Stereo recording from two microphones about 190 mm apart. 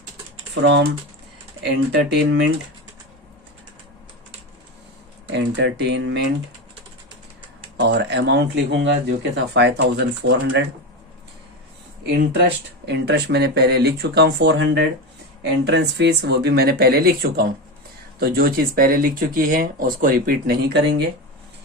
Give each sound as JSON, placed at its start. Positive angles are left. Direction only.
{"t": 0.6, "sound": "speech", "side_deg": -70}
{"t": 5.3, "sound": "speech", "side_deg": -70}
{"t": 7.8, "sound": "speech", "side_deg": -65}
{"t": 12.4, "sound": "speech", "side_deg": -65}